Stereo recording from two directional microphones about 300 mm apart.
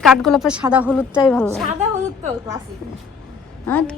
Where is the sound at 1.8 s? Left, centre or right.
Right.